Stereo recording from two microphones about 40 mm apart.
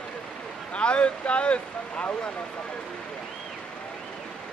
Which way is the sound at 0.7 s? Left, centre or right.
Left.